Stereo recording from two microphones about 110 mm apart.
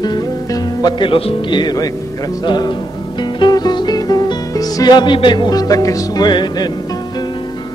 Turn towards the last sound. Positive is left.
turn(degrees=40)  # may be behind; listen again after turning